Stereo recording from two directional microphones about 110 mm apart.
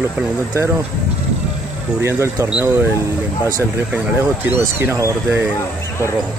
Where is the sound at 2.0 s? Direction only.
20° right (ahead or behind).